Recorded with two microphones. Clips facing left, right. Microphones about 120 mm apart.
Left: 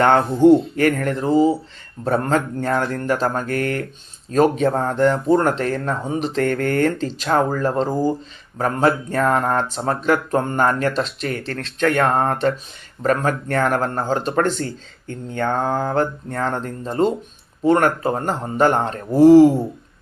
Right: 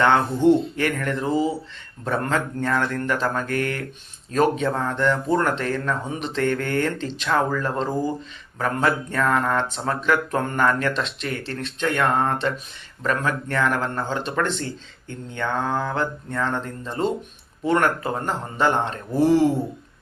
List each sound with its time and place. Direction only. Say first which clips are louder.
0.0 s speech: left 4 dB; 40° left (ahead or behind)
11.4 s speech: left 6 dB; 85° left
11.9 s speech: even; 40° left (ahead or behind)